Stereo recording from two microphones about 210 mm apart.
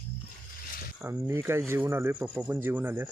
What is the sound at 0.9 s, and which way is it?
Speech, 10° right (ahead or behind).